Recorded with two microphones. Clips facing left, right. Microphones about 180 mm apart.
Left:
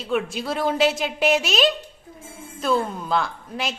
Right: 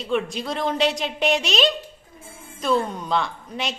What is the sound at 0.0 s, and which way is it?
A woman's voice, 5° left (ahead or behind).